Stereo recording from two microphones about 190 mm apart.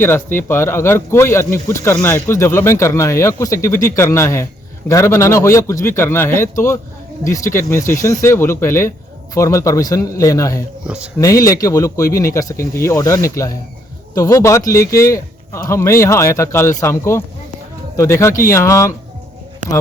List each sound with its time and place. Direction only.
0.0 s speech: 10° left (ahead or behind)
10.8 s speech: 5° right (ahead or behind)
11.2 s speech: 15° left (ahead or behind)